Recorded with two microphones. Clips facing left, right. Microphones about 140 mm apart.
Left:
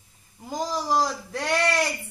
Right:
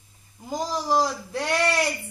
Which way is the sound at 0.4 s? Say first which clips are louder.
Right 1 dB; centre (ahead or behind).